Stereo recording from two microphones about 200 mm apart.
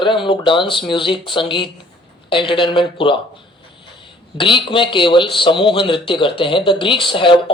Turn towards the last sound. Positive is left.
turn(degrees=25)  # may be behind; listen again after turning